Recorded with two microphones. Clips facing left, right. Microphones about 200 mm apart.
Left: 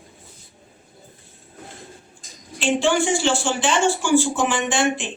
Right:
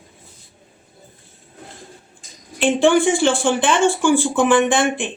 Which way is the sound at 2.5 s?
55° right (ahead or behind).